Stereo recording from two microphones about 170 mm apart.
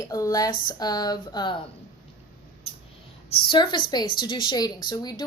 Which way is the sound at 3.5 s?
25° left (ahead or behind).